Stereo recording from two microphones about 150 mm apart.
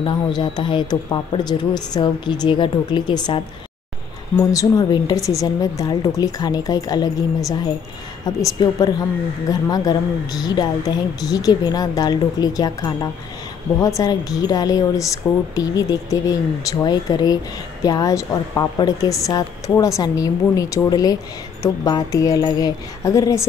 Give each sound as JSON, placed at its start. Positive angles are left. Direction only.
{"t": 0.0, "sound": "speech", "side_deg": 30}
{"t": 4.5, "sound": "speech", "side_deg": 25}